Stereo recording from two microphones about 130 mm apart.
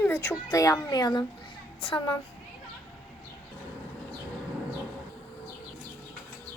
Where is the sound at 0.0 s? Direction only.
20° left (ahead or behind); by 2.0 s 35° left (ahead or behind).